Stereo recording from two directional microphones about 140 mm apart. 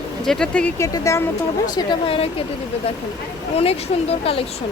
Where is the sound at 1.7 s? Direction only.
35° left (ahead or behind).